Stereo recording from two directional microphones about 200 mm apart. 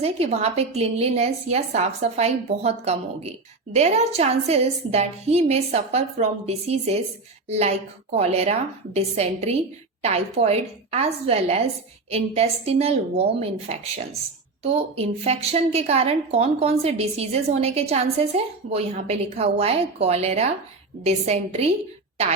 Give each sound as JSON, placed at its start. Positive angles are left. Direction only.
{"t": 0.0, "sound": "a woman's voice", "side_deg": -30}